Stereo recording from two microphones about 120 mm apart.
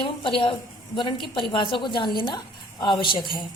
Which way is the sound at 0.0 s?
45° left (ahead or behind).